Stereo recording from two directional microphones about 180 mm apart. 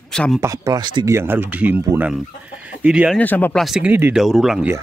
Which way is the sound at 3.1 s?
10° left (ahead or behind).